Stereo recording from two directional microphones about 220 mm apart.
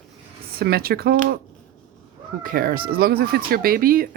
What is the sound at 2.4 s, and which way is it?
Speech, 40° right (ahead or behind).